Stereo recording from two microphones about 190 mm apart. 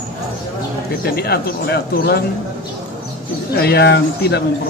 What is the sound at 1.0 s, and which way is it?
A man's voice, 55° left (ahead or behind).